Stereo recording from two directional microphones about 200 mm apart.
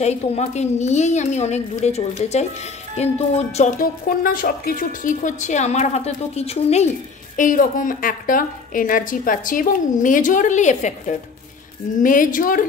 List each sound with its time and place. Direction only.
0.0 s a woman's voice: 30° left (ahead or behind)